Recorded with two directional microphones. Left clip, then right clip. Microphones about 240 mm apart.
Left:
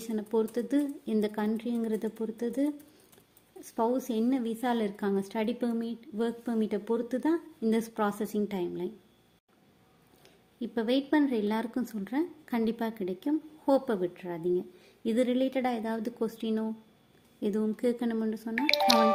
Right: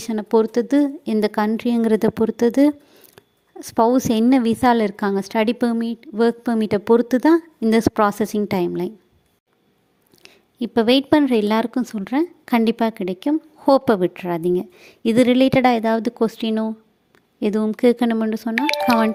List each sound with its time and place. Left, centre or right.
0.1 s a woman's voice: right
10.2 s a woman's voice: right
18.6 s speech: centre